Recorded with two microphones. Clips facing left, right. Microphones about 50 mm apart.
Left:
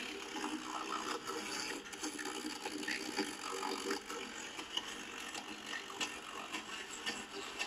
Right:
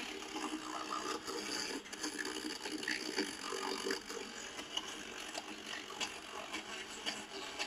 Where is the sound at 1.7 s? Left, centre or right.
Right.